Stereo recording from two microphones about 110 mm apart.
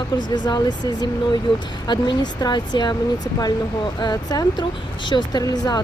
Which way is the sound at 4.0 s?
35° left (ahead or behind).